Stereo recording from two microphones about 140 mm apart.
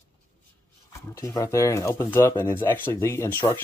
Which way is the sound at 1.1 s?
25° left (ahead or behind).